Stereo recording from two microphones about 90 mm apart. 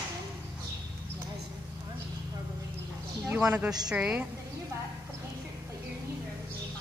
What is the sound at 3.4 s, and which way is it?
Speech, 15° right (ahead or behind).